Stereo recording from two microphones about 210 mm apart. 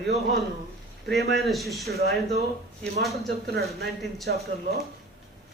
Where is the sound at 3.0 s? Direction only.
Centre (ahead or behind).